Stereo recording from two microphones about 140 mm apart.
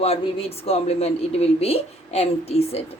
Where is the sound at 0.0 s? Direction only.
45° left (ahead or behind).